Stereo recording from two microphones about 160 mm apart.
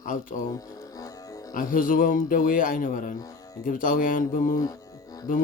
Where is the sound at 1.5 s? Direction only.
60° left (ahead or behind).